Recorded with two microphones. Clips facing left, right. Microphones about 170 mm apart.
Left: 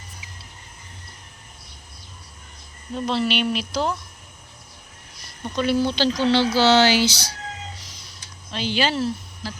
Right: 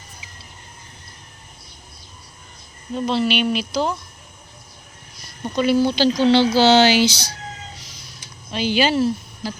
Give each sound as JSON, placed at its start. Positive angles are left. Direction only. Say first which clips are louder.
{"t": 2.9, "sound": "speech", "louder": "right 3 dB", "side_deg": 0}
{"t": 5.5, "sound": "speech", "louder": "right 4 dB", "side_deg": -10}
{"t": 6.2, "sound": "speech", "louder": "right 3 dB", "side_deg": -20}
{"t": 8.4, "sound": "speech", "louder": "right 4 dB", "side_deg": -10}